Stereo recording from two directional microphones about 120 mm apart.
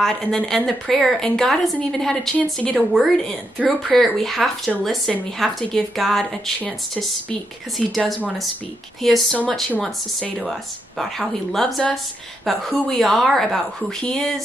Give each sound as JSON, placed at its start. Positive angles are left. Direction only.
{"t": 0.0, "sound": "speech", "side_deg": 5}
{"t": 7.7, "sound": "speech", "side_deg": 0}